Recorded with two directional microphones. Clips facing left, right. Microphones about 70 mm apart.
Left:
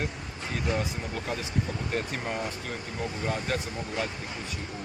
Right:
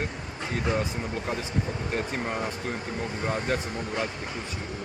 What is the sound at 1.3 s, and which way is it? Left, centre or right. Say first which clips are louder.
Speech: even; right.